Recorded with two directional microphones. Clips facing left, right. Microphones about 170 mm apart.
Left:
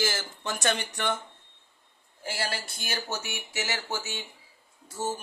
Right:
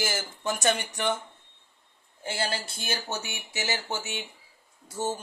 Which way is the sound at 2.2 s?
25° right (ahead or behind).